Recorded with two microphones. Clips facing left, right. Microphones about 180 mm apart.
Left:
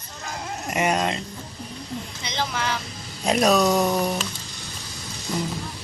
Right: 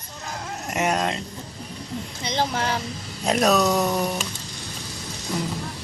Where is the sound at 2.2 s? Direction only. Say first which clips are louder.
Right 3 dB; 45° right (ahead or behind).